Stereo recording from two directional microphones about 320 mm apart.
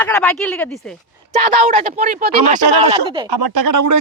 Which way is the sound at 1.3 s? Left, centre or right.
Right.